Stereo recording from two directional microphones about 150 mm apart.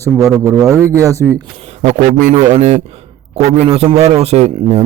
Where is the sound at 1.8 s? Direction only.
50° right (ahead or behind).